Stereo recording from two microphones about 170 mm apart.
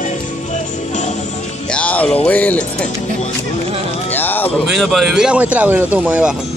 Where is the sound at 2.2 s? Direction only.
10° left (ahead or behind).